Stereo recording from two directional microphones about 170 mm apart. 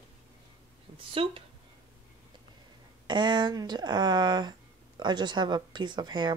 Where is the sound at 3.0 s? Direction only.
25° right (ahead or behind).